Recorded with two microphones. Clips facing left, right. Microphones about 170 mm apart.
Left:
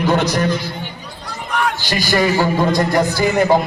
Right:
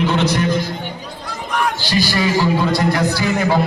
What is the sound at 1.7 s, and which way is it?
A man's voice, 45° left (ahead or behind).